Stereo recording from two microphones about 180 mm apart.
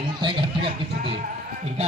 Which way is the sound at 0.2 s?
25° right (ahead or behind).